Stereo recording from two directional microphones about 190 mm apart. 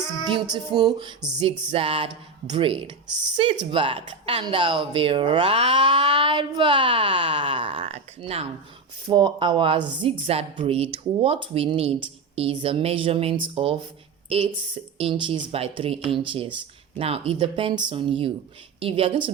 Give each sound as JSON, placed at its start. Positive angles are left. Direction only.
{"t": 0.3, "sound": "a woman's voice", "side_deg": -25}